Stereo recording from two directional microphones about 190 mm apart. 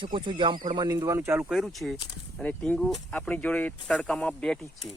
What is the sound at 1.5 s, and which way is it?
Speech, centre (ahead or behind).